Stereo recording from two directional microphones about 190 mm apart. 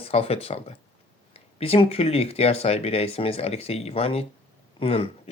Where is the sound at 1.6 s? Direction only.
30° left (ahead or behind).